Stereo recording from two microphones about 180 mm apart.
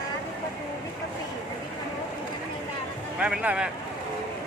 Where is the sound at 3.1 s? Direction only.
5° right (ahead or behind).